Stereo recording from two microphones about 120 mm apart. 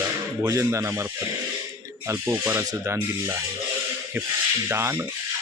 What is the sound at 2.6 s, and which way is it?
Speech, 30° right (ahead or behind).